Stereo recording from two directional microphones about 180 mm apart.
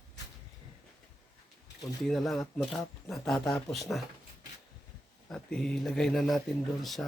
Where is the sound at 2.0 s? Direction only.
Centre (ahead or behind).